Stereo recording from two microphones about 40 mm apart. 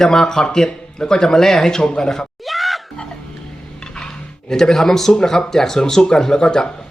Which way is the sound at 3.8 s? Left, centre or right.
Centre.